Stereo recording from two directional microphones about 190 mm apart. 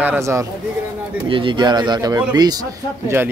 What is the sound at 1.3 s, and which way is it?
A man's voice, 25° right (ahead or behind).